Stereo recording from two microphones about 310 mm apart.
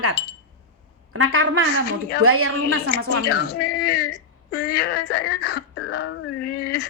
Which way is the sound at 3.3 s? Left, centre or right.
Left.